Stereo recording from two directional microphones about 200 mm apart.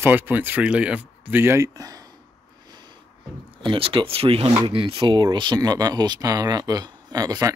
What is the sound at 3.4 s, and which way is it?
Speech, 25° right (ahead or behind).